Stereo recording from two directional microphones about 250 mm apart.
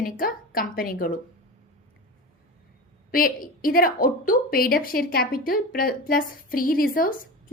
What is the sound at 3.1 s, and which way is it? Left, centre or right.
A woman's voice, left.